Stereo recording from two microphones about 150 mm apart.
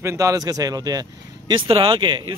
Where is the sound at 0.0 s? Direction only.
20° right (ahead or behind).